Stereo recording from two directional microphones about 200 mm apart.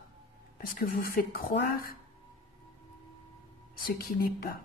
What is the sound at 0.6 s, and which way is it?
A woman's voice, 50° left (ahead or behind).